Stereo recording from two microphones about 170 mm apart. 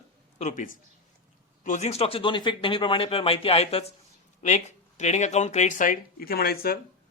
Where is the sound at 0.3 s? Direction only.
45° left (ahead or behind); by 6.7 s 65° left (ahead or behind).